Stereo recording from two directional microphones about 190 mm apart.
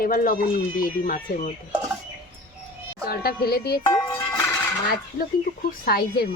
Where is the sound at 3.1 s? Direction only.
55° left (ahead or behind).